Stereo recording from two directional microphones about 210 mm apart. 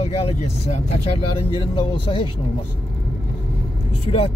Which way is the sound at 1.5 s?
25° left (ahead or behind).